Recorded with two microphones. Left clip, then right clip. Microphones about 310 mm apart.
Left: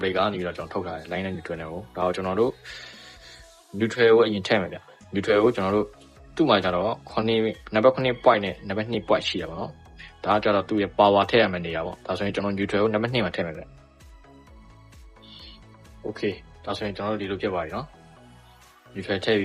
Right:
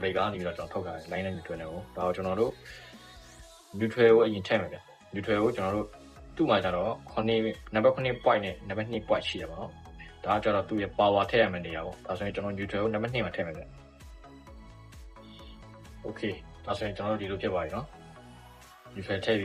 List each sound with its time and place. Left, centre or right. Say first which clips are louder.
0.0 s speech: left 5 dB; left
3.8 s speech: left 3 dB; left
16.6 s speech: left 3 dB; left
19.0 s speech: left 5 dB; left